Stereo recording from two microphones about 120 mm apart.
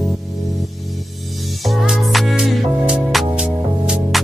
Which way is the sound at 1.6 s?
Centre (ahead or behind).